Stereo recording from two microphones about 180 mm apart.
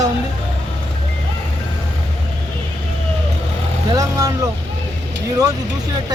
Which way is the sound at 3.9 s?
20° right (ahead or behind).